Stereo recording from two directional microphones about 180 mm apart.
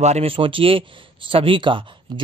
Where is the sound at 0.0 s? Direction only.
35° right (ahead or behind).